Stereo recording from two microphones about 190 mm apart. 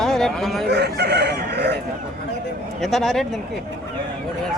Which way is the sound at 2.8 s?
Centre (ahead or behind).